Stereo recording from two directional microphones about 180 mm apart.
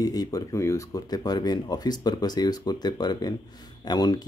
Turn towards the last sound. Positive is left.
turn(degrees=20)  # may be behind; listen again after turning